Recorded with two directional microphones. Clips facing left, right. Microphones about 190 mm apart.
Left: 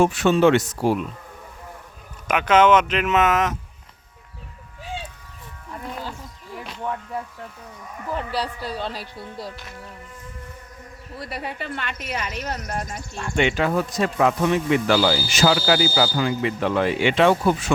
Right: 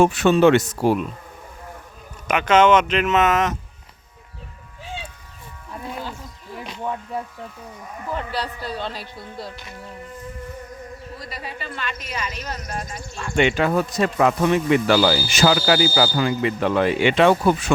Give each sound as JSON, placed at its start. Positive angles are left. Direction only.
{"t": 0.0, "sound": "speech", "side_deg": -60}
{"t": 2.2, "sound": "speech", "side_deg": 5}
{"t": 6.8, "sound": "music", "side_deg": -15}
{"t": 8.4, "sound": "speech", "side_deg": 10}
{"t": 11.2, "sound": "speech", "side_deg": 60}
{"t": 13.3, "sound": "speech", "side_deg": -55}